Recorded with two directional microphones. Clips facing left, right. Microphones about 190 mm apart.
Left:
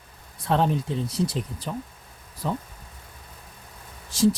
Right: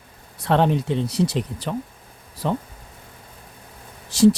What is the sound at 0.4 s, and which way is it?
Speech, 70° right (ahead or behind).